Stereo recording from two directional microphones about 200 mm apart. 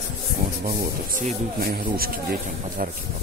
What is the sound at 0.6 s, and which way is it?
Speech, 45° right (ahead or behind).